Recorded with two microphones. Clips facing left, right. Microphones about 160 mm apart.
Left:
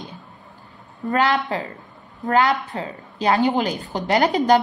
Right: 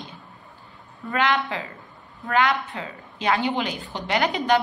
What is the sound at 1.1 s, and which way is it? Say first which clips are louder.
A woman's voice: left 3 dB; 40° left (ahead or behind).